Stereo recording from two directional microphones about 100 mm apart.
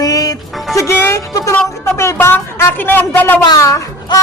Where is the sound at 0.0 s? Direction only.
40° left (ahead or behind).